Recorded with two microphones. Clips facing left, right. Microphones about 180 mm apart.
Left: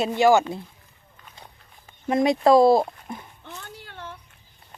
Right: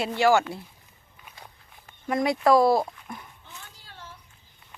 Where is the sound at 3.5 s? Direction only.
65° left (ahead or behind).